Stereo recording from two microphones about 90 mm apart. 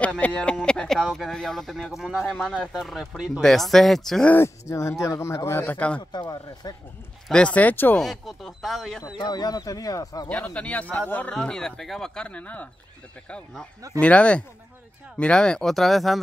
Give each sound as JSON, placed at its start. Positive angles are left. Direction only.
{"t": 0.0, "sound": "speech", "side_deg": 15}
{"t": 4.6, "sound": "speech", "side_deg": 35}
{"t": 5.7, "sound": "speech", "side_deg": 15}
{"t": 5.9, "sound": "speech", "side_deg": 55}
{"t": 7.2, "sound": "speech", "side_deg": 10}
{"t": 8.0, "sound": "speech", "side_deg": 0}
{"t": 9.2, "sound": "speech", "side_deg": 50}
{"t": 10.5, "sound": "speech", "side_deg": 15}
{"t": 11.3, "sound": "speech", "side_deg": 5}
{"t": 12.3, "sound": "speech", "side_deg": 15}
{"t": 13.9, "sound": "speech", "side_deg": 15}